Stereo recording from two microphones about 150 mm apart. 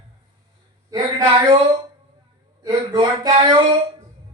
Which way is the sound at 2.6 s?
25° right (ahead or behind).